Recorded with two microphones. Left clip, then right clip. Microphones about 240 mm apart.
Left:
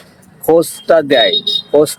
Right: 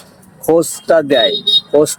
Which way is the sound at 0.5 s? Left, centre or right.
Centre.